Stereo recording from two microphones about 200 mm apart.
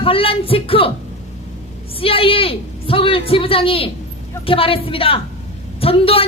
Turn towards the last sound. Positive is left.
turn(degrees=30)  # may be behind; listen again after turning